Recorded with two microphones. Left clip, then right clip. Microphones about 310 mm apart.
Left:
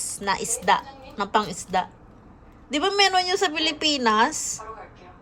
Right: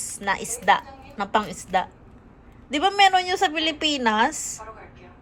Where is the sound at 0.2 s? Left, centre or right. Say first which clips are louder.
Even; centre.